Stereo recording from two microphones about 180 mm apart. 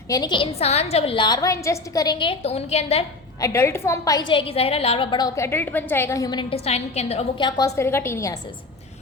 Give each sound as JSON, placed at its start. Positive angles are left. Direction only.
{"t": 0.1, "sound": "a woman's voice", "side_deg": 25}
{"t": 3.4, "sound": "a woman's voice", "side_deg": 15}
{"t": 6.5, "sound": "a woman's voice", "side_deg": 35}